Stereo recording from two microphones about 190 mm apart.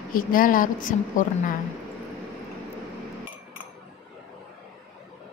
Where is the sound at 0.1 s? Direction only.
45° left (ahead or behind).